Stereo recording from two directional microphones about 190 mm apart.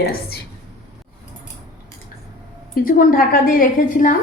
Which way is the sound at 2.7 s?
50° left (ahead or behind).